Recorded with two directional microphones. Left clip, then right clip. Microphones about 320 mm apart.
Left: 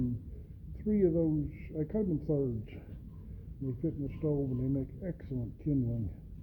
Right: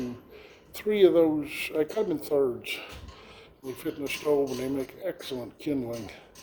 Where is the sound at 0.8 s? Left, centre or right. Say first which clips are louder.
Right 10 dB; centre.